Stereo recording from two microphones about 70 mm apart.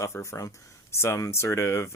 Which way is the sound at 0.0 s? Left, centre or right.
Left.